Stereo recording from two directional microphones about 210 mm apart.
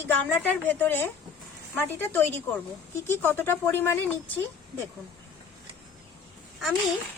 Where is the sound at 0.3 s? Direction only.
10° left (ahead or behind).